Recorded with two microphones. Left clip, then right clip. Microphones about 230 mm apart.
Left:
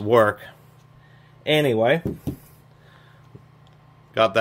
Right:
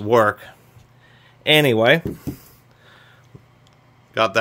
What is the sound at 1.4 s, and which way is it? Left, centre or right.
Speech, right.